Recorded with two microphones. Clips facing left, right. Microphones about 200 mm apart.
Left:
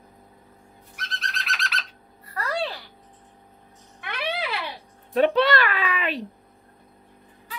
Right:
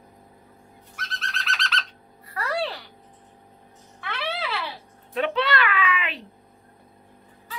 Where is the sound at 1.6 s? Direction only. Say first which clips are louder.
Right 2 dB; 10° left (ahead or behind).